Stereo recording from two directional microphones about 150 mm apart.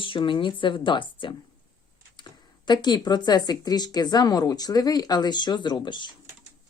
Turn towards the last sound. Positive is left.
turn(degrees=30)  # may be behind; listen again after turning